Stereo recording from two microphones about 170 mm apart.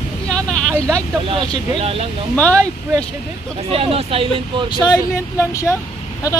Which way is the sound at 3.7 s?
35° right (ahead or behind).